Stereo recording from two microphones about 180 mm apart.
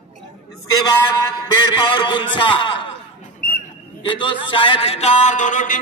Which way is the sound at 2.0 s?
25° left (ahead or behind).